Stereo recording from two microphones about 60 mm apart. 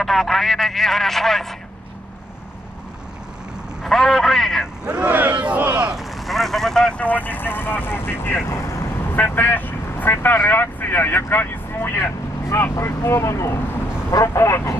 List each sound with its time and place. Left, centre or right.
0.0 s speech: centre
3.8 s speech: centre
4.8 s speech: centre
5.1 s a sound: right
5.9 s vehicle: centre
7.0 s speech: left
8.5 s speech: left
9.0 s speech: left
12.7 s speech: left